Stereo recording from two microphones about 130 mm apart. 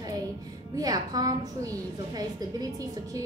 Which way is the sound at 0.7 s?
30° right (ahead or behind).